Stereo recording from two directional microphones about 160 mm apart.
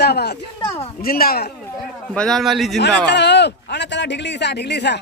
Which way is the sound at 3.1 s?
90° left.